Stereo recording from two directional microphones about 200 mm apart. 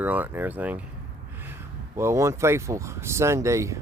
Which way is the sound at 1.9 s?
15° right (ahead or behind).